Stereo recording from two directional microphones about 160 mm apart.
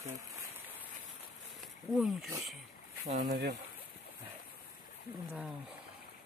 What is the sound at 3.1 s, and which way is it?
Speech, 90° right.